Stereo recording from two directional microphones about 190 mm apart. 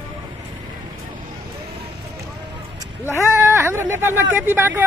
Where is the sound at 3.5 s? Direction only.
10° right (ahead or behind).